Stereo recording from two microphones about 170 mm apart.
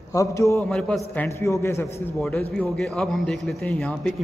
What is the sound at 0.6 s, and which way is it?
Speech, centre (ahead or behind).